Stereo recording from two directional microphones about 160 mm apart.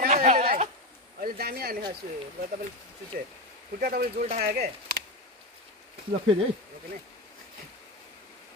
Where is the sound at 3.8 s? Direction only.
60° right (ahead or behind).